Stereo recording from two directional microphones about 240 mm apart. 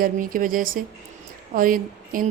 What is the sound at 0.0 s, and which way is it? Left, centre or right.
A woman's voice, right.